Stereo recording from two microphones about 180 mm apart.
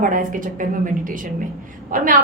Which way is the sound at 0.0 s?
50° right (ahead or behind).